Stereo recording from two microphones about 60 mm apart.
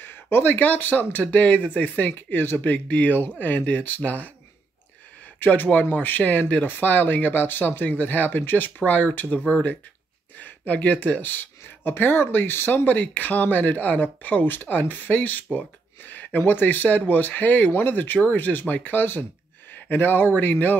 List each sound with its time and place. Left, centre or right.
0.0 s speech: left
5.4 s speech: left